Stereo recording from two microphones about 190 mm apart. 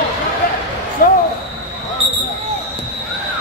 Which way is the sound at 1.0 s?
45° left (ahead or behind).